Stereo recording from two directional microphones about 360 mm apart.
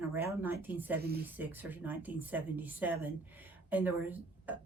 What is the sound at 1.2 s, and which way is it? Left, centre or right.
A woman's voice, centre.